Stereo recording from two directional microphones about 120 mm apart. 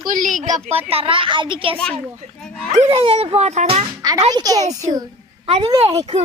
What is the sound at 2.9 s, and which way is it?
Speech, 50° right (ahead or behind).